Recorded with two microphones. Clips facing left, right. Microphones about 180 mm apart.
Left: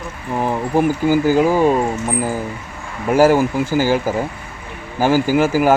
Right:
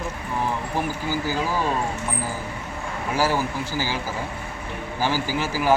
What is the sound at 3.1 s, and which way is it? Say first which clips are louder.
Speech: left 11 dB; 50° left (ahead or behind).